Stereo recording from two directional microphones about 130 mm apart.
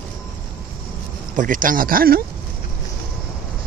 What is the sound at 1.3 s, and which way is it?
Speech, 85° right.